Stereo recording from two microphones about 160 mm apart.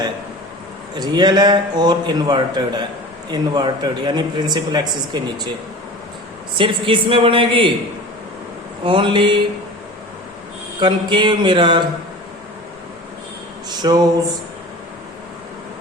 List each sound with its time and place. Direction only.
0.9 s a man's voice: 25° right (ahead or behind)
6.6 s speech: 30° right (ahead or behind)
8.8 s speech: 30° right (ahead or behind)
10.8 s a man's voice: 30° right (ahead or behind)
13.7 s a sound: 25° right (ahead or behind)